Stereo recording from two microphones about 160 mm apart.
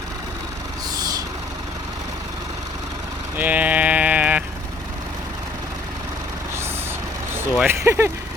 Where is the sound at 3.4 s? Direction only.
10° right (ahead or behind).